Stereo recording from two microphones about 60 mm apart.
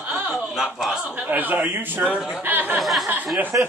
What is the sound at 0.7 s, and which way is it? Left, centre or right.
Speech, centre.